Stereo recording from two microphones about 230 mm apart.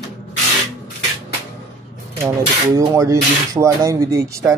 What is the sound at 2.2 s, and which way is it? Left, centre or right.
Speech, centre.